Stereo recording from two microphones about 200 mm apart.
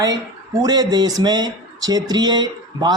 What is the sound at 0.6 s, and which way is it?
Speech, 20° right (ahead or behind).